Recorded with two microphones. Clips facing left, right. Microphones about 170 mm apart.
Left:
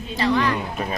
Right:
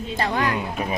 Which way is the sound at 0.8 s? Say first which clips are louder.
Right 1 dB; 10° right (ahead or behind).